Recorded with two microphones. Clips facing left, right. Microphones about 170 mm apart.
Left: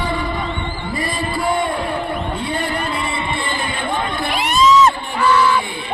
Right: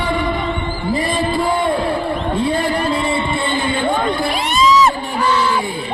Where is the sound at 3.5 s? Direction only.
30° right (ahead or behind).